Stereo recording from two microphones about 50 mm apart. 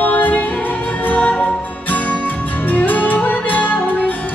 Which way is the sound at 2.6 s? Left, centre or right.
Left.